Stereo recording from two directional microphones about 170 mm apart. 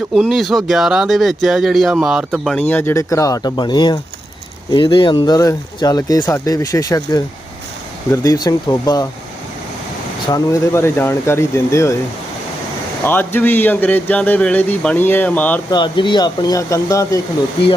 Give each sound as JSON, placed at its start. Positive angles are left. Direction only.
{"t": 0.1, "sound": "speech", "side_deg": 0}
{"t": 10.2, "sound": "speech", "side_deg": 20}
{"t": 13.1, "sound": "speech", "side_deg": 10}
{"t": 15.7, "sound": "speech", "side_deg": 25}